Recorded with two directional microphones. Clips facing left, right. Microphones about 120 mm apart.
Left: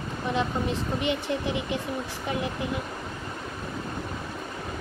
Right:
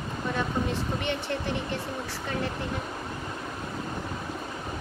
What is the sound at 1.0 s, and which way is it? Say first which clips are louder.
Speech: left 3 dB; 10° left (ahead or behind).